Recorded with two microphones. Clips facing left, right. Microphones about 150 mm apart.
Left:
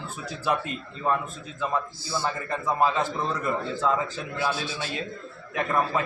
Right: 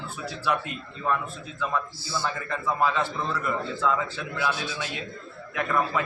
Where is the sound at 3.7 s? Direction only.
35° left (ahead or behind).